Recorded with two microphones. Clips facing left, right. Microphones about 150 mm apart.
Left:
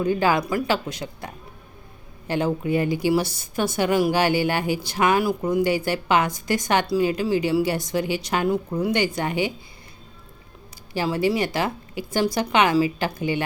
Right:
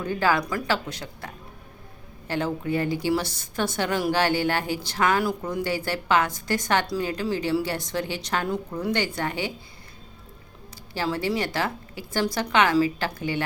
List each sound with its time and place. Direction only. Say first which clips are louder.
0.0 s a woman's voice: left 3 dB; 15° left (ahead or behind)
10.9 s a woman's voice: left 4 dB; 15° left (ahead or behind)